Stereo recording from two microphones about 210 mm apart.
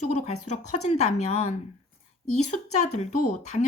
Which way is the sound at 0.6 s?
90° left.